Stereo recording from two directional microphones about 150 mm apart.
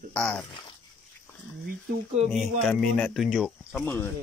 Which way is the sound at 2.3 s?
Centre (ahead or behind).